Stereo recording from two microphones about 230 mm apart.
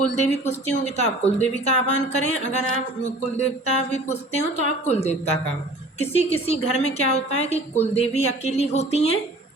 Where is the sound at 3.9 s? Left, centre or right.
Left.